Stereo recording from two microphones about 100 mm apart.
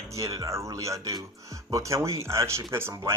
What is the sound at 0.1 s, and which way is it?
Speech, 35° right (ahead or behind).